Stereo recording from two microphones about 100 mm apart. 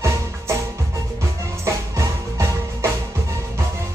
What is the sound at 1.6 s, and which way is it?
Music, 30° right (ahead or behind).